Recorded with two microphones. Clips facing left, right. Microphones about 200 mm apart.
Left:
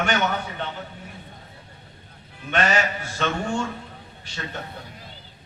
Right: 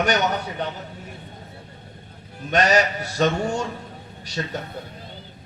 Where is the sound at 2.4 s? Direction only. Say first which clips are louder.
Right 4 dB; 40° right (ahead or behind).